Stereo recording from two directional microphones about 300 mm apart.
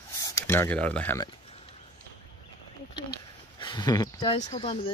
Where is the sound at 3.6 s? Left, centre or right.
Centre.